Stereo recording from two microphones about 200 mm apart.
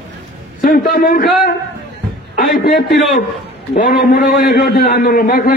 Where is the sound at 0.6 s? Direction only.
45° left (ahead or behind).